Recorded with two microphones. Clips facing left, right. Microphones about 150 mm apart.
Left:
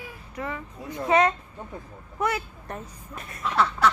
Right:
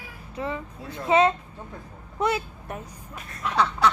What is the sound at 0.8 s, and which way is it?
Speech, 20° left (ahead or behind).